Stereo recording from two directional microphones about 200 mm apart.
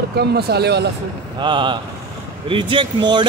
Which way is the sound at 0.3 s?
55° right (ahead or behind).